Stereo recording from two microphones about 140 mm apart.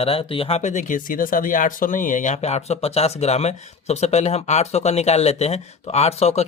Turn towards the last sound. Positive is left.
turn(degrees=50)  # may be behind; listen again after turning